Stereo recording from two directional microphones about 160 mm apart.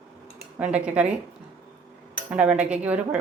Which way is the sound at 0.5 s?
10° right (ahead or behind).